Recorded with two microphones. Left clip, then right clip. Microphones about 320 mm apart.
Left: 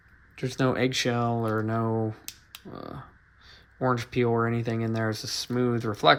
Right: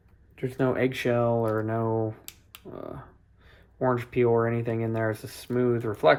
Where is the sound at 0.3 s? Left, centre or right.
Centre.